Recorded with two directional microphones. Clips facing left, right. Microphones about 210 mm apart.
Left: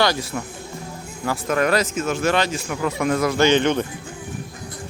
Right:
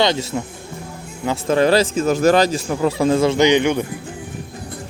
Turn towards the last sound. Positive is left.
turn(degrees=-10)  # may be behind; listen again after turning